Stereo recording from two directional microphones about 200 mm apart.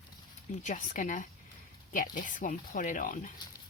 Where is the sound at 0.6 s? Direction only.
40° left (ahead or behind).